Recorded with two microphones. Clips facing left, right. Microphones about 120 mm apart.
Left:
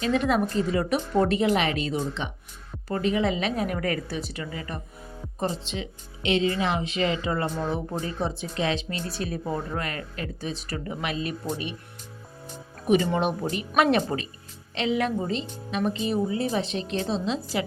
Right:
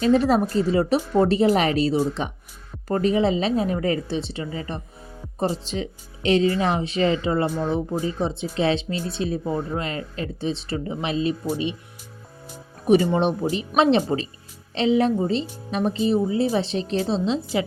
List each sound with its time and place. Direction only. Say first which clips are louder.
0.0 s a woman's voice: right 5 dB; 35° right (ahead or behind)
5.4 s speech: right 5 dB; 35° right (ahead or behind)
7.4 s speech: right 4 dB; 5° right (ahead or behind)
8.0 s a woman's voice: right 4 dB; 25° right (ahead or behind)
9.4 s speech: right 4 dB; 5° right (ahead or behind)
9.6 s a woman's voice: right 4 dB; 25° right (ahead or behind)
13.1 s a woman's voice: right 4 dB; 30° right (ahead or behind)